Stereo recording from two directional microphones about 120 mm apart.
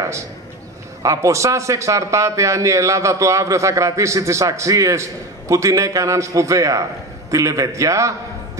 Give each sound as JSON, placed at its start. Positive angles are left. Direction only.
{"t": 1.0, "sound": "a man's voice", "side_deg": -25}